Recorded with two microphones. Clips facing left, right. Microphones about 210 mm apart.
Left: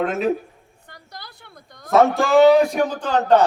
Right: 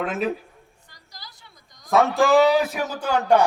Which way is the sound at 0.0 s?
Centre (ahead or behind).